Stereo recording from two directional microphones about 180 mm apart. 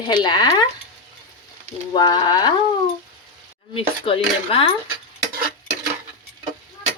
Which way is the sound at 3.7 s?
30° left (ahead or behind).